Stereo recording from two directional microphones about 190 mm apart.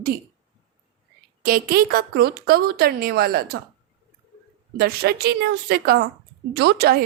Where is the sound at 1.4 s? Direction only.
50° right (ahead or behind).